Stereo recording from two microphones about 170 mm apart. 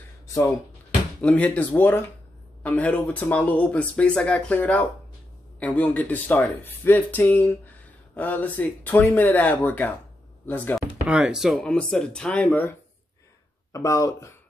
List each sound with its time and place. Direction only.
1.2 s speech: 5° left (ahead or behind)
11.1 s speech: 5° right (ahead or behind); by 14.3 s 20° left (ahead or behind)